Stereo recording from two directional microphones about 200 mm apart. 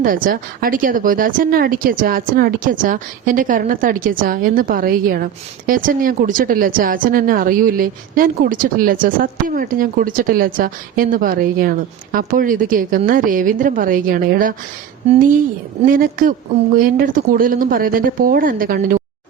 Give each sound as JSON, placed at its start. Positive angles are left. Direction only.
{"t": 0.0, "sound": "speech", "side_deg": -45}